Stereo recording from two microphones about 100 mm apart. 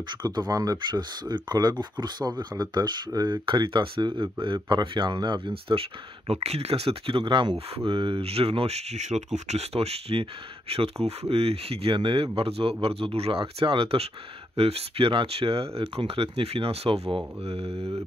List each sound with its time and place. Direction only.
0.1 s speech: 45° right (ahead or behind)
3.4 s speech: 55° right (ahead or behind)
7.5 s speech: 65° right (ahead or behind)